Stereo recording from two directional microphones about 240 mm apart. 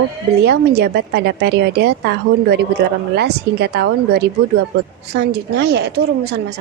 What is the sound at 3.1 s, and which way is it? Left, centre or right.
A woman's voice, right.